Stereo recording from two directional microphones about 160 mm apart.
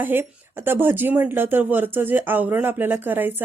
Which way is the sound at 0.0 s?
15° right (ahead or behind).